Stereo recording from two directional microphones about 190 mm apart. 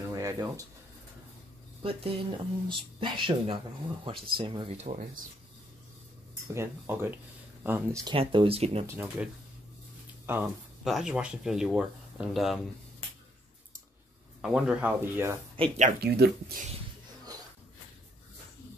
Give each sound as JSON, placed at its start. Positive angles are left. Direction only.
{"t": 0.1, "sound": "a sound", "side_deg": -20}
{"t": 1.8, "sound": "speech", "side_deg": -30}
{"t": 6.5, "sound": "speech", "side_deg": -15}
{"t": 8.1, "sound": "speech", "side_deg": -25}
{"t": 8.8, "sound": "speech", "side_deg": -10}
{"t": 14.4, "sound": "speech", "side_deg": -5}
{"t": 15.5, "sound": "speech", "side_deg": -30}
{"t": 16.0, "sound": "speech", "side_deg": -55}